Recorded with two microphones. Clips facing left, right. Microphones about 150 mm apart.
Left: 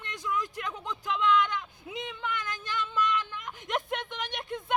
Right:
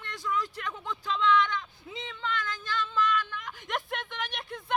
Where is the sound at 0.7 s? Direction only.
20° left (ahead or behind).